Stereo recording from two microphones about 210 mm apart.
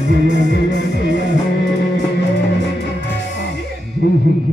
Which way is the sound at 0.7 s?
60° left (ahead or behind).